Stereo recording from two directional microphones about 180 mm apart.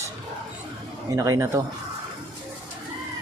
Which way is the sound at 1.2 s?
20° right (ahead or behind).